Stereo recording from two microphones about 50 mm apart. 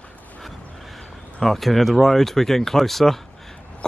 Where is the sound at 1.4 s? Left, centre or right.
Centre.